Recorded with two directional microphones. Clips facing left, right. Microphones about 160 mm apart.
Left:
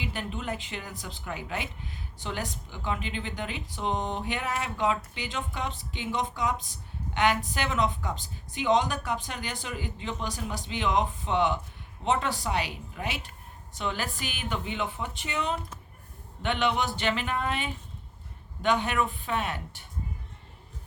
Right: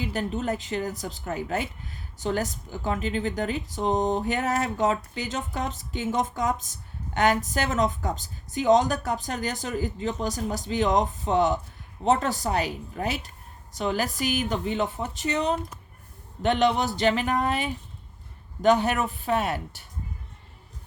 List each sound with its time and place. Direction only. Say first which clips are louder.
0.0 s speech: right 6 dB; 40° right (ahead or behind)